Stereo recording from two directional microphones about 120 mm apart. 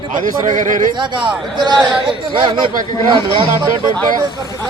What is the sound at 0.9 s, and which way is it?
A man's voice, 40° right (ahead or behind).